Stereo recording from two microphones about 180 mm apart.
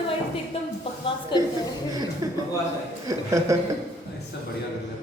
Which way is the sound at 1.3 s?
25° left (ahead or behind).